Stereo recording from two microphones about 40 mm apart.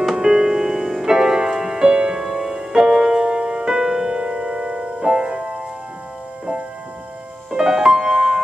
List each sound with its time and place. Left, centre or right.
0.1 s music: centre
4.2 s music: right
7.5 s music: centre